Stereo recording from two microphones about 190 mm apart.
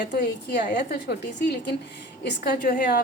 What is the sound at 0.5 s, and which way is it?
A woman's voice, 60° left (ahead or behind).